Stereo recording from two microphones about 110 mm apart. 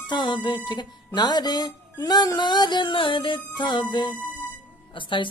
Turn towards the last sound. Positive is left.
turn(degrees=50)  # may be behind; listen again after turning